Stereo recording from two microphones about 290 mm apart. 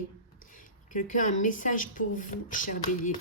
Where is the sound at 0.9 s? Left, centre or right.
Left.